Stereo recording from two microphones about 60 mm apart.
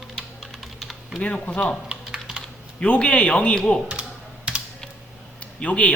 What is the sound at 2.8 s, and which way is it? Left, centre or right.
Speech, centre.